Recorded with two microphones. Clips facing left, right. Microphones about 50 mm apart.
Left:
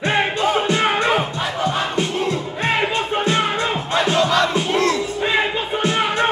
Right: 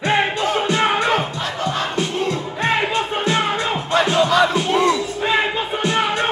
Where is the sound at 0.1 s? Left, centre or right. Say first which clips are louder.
Even; centre.